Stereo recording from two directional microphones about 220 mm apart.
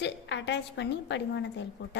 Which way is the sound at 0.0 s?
55° left (ahead or behind).